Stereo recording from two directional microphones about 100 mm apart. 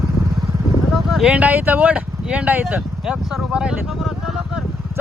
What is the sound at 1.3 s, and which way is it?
Speech, 15° right (ahead or behind).